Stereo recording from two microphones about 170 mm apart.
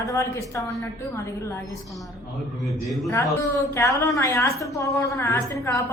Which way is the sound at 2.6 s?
Centre (ahead or behind).